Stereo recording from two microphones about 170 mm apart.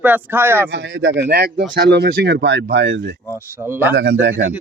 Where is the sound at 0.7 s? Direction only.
90° right.